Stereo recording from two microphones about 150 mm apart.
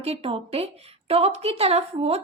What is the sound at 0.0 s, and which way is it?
A woman's voice, 40° right (ahead or behind).